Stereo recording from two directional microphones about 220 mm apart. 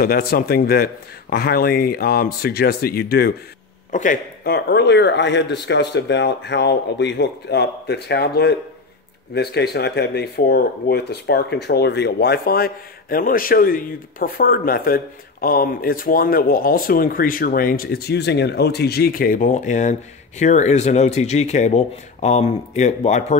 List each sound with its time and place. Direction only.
0.0 s speech: 45° left (ahead or behind)